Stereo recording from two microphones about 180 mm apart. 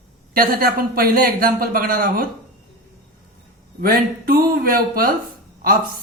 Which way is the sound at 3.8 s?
55° right (ahead or behind).